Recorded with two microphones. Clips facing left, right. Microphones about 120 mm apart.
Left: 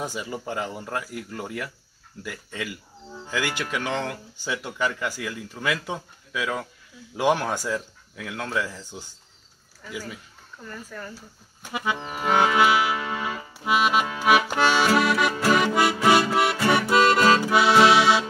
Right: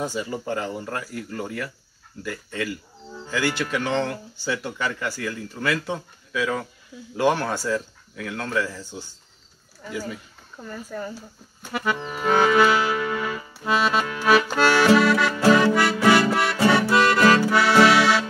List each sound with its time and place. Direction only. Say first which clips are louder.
0.0 s speech: right 3 dB; 10° left (ahead or behind)
10.7 s speech: right 6 dB; 20° right (ahead or behind)
11.6 s music: right 2 dB; 15° left (ahead or behind)
13.7 s accordion: even; 15° left (ahead or behind)
15.0 s music: right 2 dB; 15° left (ahead or behind)
16.6 s accordion: right 2 dB; 20° left (ahead or behind)